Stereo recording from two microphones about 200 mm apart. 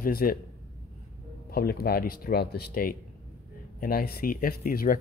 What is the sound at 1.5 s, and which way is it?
Speech, 50° left (ahead or behind).